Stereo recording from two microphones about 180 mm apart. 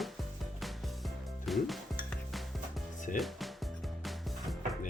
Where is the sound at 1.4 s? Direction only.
Centre (ahead or behind).